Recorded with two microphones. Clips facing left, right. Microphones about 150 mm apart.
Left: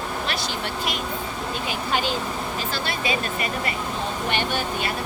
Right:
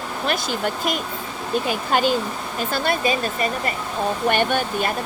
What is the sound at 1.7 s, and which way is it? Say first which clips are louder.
Speech: right 5 dB; 45° right (ahead or behind).